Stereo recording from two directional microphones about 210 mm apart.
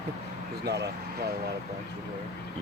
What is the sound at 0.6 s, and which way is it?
Speech, 50° right (ahead or behind).